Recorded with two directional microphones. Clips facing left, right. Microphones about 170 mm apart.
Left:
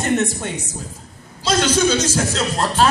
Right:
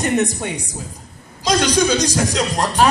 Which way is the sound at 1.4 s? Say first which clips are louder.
Right 1 dB; 15° right (ahead or behind).